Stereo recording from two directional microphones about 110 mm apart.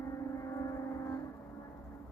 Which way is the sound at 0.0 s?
30° left (ahead or behind).